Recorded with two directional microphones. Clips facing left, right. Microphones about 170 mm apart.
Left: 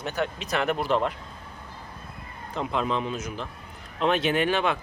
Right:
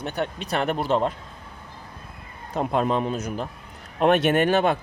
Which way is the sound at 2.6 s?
45° right (ahead or behind).